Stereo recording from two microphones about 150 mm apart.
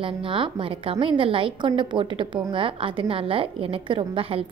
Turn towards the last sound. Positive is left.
turn(degrees=-40)  # may be behind; listen again after turning